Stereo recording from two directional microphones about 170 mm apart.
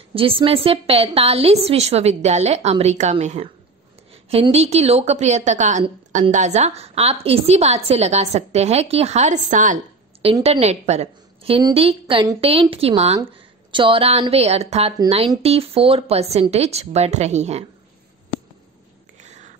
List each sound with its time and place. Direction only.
0.1 s a woman's voice: 30° right (ahead or behind)
19.1 s whispering: 45° right (ahead or behind)